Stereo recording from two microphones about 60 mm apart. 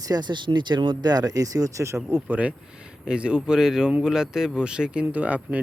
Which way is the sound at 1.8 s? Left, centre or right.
Right.